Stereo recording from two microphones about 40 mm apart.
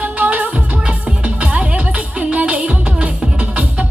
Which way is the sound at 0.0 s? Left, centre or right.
Right.